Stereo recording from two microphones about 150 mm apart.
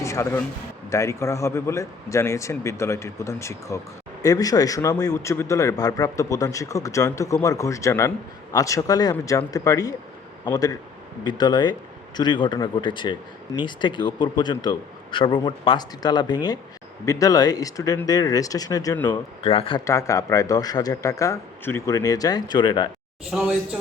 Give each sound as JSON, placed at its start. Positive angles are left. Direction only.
{"t": 0.0, "sound": "a man's voice", "side_deg": 20}
{"t": 19.4, "sound": "speech", "side_deg": 40}
{"t": 19.8, "sound": "a man's voice", "side_deg": 20}